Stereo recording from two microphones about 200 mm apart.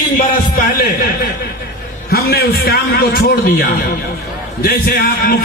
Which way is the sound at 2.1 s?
50° left (ahead or behind).